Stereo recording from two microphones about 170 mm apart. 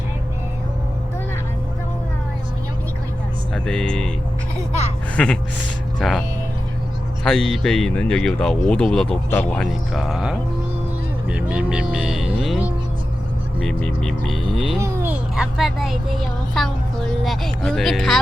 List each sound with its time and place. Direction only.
3.5 s speech: 5° left (ahead or behind)
5.1 s speech: 5° left (ahead or behind)
7.3 s speech: 5° left (ahead or behind)
11.3 s music: 5° right (ahead or behind)
13.7 s speech: 5° left (ahead or behind)
14.8 s a child's voice: 15° right (ahead or behind); by 18.2 s centre (ahead or behind)